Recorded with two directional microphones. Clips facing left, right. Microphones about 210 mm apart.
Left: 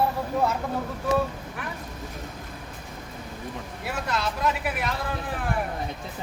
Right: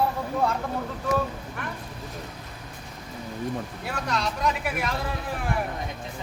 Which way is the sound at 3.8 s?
5° left (ahead or behind).